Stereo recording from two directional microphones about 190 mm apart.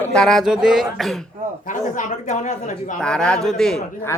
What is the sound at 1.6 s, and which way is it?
Speech, 40° left (ahead or behind).